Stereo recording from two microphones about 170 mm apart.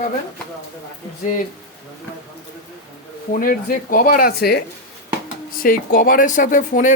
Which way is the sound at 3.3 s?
60° left (ahead or behind).